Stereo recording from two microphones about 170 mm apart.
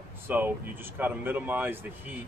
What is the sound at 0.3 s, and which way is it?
Speech, 10° right (ahead or behind).